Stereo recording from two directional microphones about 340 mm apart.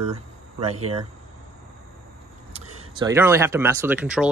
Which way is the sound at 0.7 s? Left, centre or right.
Right.